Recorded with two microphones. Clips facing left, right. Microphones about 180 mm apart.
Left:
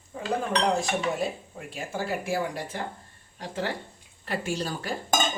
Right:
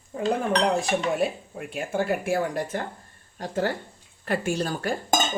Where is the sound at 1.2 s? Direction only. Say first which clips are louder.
Right 4 dB; 60° right (ahead or behind).